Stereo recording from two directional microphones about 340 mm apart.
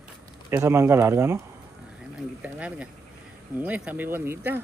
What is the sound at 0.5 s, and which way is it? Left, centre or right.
Speech, centre.